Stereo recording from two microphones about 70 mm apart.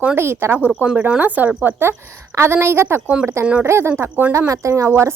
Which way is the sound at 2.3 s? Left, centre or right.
Right.